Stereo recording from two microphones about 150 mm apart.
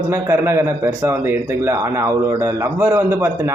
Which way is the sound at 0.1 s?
20° right (ahead or behind).